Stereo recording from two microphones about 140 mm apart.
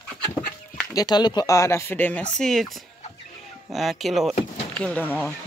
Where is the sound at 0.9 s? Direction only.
30° left (ahead or behind).